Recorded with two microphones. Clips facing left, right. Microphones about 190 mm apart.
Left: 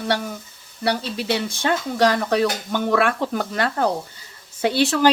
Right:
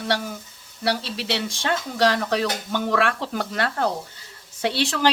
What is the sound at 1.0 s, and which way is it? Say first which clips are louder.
Speech: left 4 dB; 50° left (ahead or behind).